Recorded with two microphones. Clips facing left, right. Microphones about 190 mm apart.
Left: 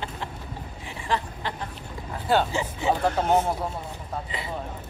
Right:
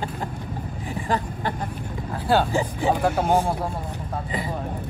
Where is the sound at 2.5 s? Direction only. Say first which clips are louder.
Right 5 dB; 40° right (ahead or behind).